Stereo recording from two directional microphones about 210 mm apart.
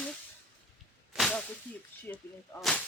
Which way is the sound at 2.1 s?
5° left (ahead or behind).